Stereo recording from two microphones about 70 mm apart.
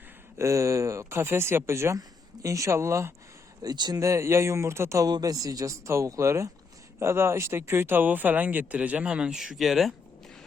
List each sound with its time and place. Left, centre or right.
0.3 s speech: right
2.0 s speech: right
3.6 s speech: right
4.0 s speech: right
5.0 s speech: right; by 9.9 s centre